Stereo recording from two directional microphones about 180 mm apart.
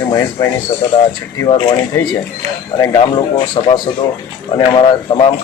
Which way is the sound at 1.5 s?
25° left (ahead or behind).